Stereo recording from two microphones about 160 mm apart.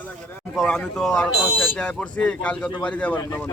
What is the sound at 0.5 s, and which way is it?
Speech, 5° left (ahead or behind).